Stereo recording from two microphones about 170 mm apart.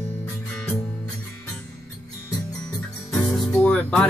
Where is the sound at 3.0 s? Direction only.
20° left (ahead or behind).